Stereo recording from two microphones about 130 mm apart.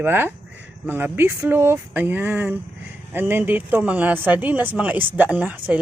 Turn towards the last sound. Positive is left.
turn(degrees=-10)  # may be behind; listen again after turning